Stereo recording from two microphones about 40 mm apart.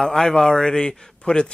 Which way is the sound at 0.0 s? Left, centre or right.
Centre.